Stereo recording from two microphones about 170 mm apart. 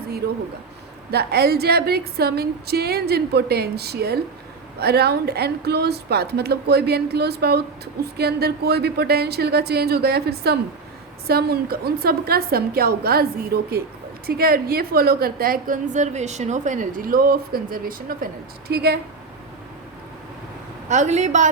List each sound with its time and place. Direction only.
1.1 s a woman's voice: 70° right (ahead or behind)
18.7 s speech: 70° right (ahead or behind)
20.9 s a woman's voice: 45° right (ahead or behind)